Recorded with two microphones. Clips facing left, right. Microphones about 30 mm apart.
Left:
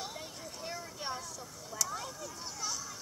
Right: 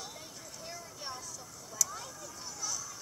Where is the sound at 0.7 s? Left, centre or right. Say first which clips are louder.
Left 4 dB; left.